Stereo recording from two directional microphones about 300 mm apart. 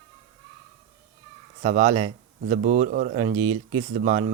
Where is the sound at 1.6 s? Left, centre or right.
Centre.